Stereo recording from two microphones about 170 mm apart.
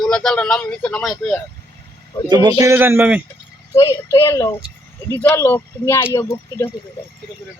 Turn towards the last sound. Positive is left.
turn(degrees=15)  # may be behind; listen again after turning